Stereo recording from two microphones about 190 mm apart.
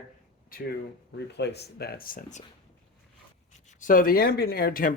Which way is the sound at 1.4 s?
60° left (ahead or behind).